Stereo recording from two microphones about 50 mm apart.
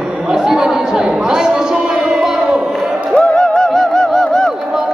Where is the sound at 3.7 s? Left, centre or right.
Centre.